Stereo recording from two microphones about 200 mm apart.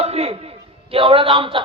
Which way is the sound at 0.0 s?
30° right (ahead or behind).